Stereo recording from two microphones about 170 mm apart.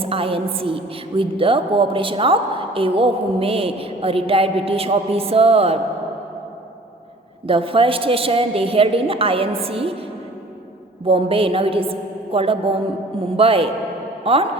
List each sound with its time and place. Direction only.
0.0 s a woman's voice: 35° right (ahead or behind)
7.4 s a woman's voice: 30° right (ahead or behind)